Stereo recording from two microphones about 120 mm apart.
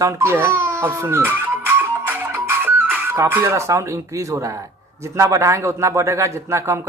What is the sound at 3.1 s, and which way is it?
Speech, 20° right (ahead or behind).